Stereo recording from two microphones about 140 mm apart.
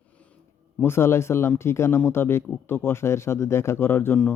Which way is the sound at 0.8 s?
15° left (ahead or behind).